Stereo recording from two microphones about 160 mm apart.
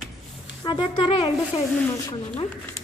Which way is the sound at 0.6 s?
30° left (ahead or behind).